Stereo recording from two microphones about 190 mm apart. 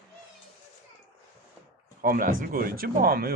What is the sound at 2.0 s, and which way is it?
Speech, 50° right (ahead or behind).